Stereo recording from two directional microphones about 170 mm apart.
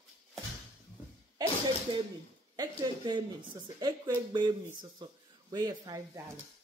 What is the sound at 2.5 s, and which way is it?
Speech, 25° right (ahead or behind).